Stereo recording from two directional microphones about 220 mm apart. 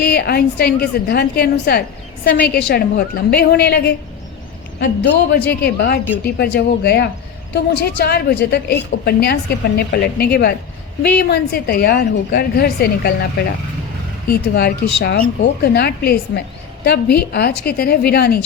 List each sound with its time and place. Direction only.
0.0 s a woman's voice: 45° left (ahead or behind)
14.3 s a woman's voice: 45° left (ahead or behind)